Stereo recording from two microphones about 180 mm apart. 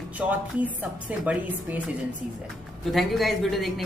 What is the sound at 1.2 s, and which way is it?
Speech, 10° right (ahead or behind).